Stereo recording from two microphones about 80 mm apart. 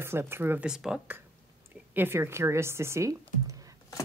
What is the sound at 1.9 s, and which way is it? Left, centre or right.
Speech, right.